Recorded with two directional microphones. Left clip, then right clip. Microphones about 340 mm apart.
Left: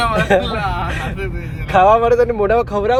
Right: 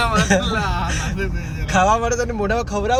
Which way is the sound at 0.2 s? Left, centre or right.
Centre.